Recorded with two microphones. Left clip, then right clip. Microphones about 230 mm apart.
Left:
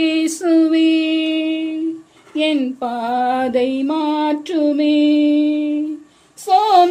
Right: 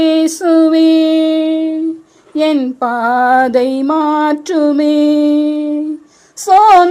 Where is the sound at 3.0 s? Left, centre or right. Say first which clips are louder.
Right 8 dB; centre.